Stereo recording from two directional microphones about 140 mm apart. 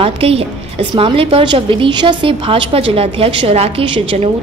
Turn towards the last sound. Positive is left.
turn(degrees=-40)  # may be behind; listen again after turning